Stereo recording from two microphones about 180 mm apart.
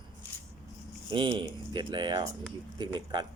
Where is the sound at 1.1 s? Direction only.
25° right (ahead or behind).